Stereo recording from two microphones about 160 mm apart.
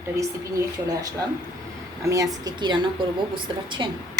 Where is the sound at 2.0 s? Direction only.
20° right (ahead or behind).